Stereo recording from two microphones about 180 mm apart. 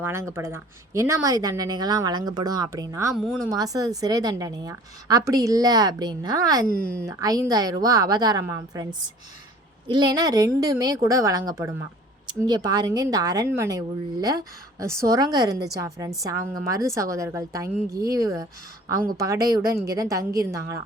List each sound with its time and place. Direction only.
0.0 s speech: 15° right (ahead or behind)
6.7 s speech: 55° right (ahead or behind)
7.0 s a woman's voice: 20° right (ahead or behind)